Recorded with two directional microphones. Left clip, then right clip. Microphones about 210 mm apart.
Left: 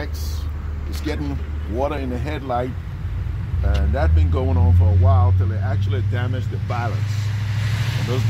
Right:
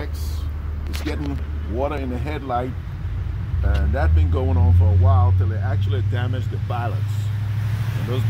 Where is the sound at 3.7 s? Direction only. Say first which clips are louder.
Left 1 dB; 20° left (ahead or behind).